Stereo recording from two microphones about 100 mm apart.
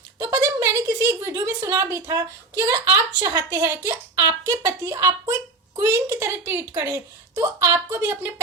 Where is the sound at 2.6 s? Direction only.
40° right (ahead or behind).